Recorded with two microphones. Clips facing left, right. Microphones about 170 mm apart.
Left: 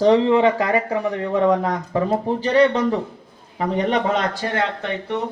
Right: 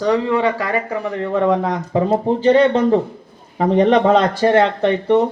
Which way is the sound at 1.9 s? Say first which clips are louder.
Right 5 dB; 20° right (ahead or behind).